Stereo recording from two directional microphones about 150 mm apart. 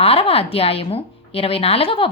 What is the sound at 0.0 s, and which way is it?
A woman's voice, 40° left (ahead or behind).